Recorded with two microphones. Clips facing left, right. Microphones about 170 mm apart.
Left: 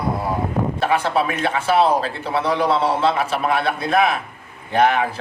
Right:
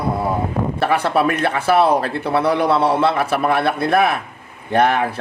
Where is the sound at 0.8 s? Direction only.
65° right (ahead or behind).